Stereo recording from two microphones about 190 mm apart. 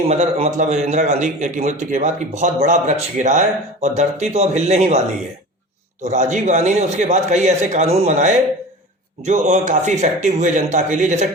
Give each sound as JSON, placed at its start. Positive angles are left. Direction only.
{"t": 0.1, "sound": "a man's voice", "side_deg": -35}